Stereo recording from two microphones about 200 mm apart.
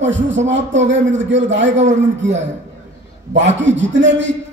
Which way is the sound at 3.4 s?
65° right (ahead or behind).